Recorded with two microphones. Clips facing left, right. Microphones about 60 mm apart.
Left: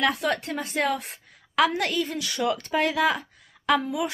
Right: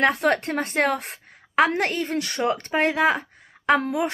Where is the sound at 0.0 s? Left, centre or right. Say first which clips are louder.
Right 4 dB; right.